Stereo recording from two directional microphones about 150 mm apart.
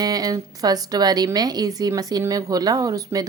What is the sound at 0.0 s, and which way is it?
Speech, 25° right (ahead or behind).